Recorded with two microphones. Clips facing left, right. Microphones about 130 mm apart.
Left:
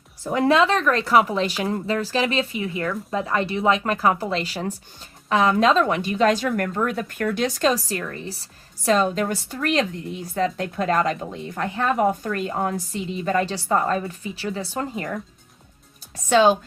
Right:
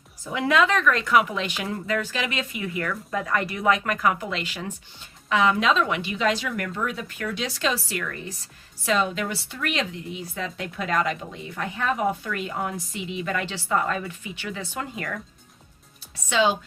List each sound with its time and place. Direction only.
0.3 s speech: 35° left (ahead or behind)
16.1 s speech: 45° left (ahead or behind)